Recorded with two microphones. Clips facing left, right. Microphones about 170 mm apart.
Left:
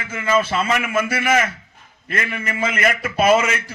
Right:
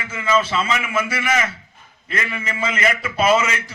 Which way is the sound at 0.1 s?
55° left (ahead or behind).